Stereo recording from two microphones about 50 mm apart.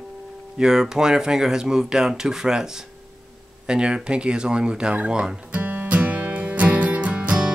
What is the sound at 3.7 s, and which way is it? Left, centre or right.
Speech, centre.